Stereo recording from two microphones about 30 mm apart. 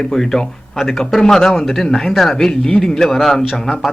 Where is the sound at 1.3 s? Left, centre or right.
Centre.